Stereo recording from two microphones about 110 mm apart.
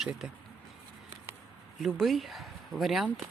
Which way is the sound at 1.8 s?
Centre (ahead or behind).